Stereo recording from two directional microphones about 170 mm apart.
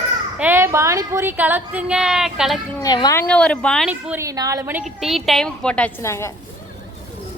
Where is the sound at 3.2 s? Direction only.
5° left (ahead or behind).